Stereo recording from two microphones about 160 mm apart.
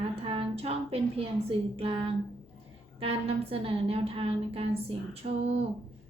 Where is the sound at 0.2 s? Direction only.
35° right (ahead or behind).